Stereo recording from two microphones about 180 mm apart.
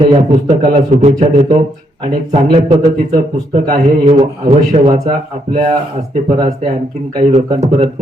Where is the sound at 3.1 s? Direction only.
35° right (ahead or behind).